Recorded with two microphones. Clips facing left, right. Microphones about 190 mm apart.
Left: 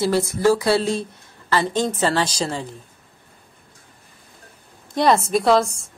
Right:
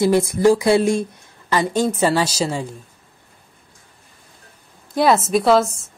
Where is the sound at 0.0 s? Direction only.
15° right (ahead or behind).